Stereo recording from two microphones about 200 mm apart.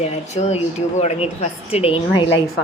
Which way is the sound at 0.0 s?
30° left (ahead or behind).